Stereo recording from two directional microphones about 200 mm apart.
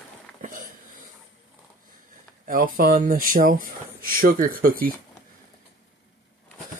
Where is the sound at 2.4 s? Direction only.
45° right (ahead or behind).